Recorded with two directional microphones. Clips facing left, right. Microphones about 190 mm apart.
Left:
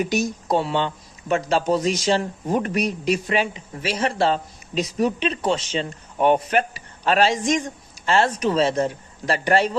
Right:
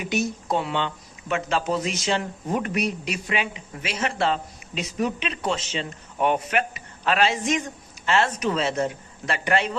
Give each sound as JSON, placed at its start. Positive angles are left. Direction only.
{"t": 0.0, "sound": "speech", "side_deg": 40}